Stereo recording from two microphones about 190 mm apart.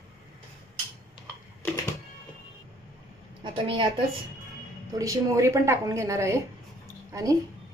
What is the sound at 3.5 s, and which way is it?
Speech, 25° right (ahead or behind).